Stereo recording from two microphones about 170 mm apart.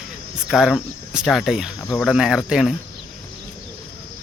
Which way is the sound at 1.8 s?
10° left (ahead or behind).